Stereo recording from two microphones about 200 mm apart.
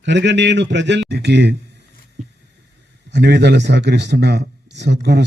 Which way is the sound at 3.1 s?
60° right (ahead or behind).